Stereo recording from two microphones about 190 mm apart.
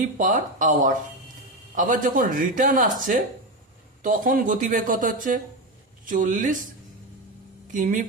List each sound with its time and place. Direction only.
0.0 s speech: 45° right (ahead or behind)
7.7 s speech: 45° right (ahead or behind)